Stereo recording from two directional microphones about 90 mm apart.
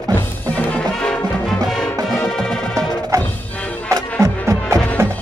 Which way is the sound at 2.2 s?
10° left (ahead or behind).